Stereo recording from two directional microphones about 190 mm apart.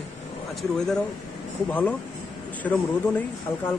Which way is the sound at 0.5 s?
Centre (ahead or behind).